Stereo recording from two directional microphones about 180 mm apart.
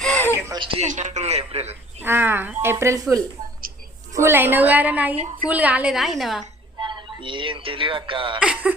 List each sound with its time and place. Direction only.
0.0 s a sound: 10° left (ahead or behind)
0.4 s speech: 25° right (ahead or behind)
0.9 s a man's voice: 40° right (ahead or behind)
2.0 s a woman's voice: 10° right (ahead or behind)
6.8 s speech: 25° right (ahead or behind)
8.4 s a woman's voice: 5° right (ahead or behind)